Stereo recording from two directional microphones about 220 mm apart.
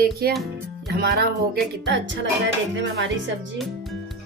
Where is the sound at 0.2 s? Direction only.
45° right (ahead or behind).